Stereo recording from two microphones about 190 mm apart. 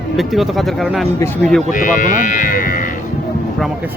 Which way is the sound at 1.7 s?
45° left (ahead or behind).